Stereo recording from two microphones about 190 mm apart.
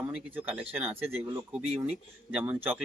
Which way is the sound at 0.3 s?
10° right (ahead or behind).